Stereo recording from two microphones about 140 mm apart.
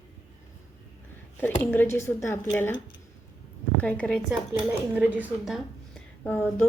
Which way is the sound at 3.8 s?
10° left (ahead or behind).